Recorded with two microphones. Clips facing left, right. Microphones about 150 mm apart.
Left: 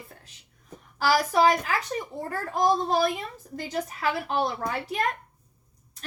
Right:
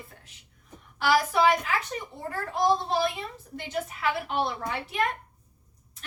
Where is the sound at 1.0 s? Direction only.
40° left (ahead or behind).